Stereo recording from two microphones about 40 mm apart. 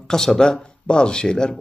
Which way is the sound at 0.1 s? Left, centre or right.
Centre.